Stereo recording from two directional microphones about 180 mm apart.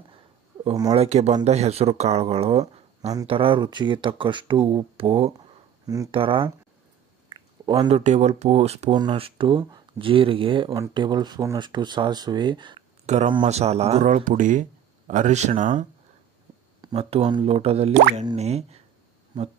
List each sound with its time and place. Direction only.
0.8 s speech: 35° right (ahead or behind)
13.0 s speech: 40° right (ahead or behind)
16.9 s speech: 35° right (ahead or behind)